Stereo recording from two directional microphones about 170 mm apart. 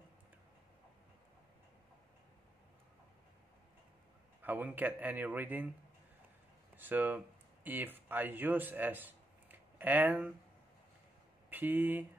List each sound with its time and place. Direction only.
4.4 s speech: 10° right (ahead or behind)
6.8 s speech: 10° right (ahead or behind)
11.5 s speech: 10° right (ahead or behind)